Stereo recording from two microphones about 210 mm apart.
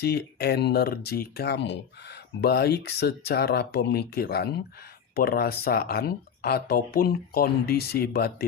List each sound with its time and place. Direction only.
0.0 s speech: 50° left (ahead or behind)